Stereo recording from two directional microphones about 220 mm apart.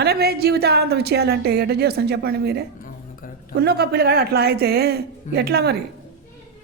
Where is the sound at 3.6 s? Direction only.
45° right (ahead or behind).